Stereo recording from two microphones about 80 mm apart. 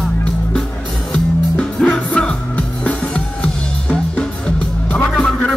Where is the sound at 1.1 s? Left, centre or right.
Centre.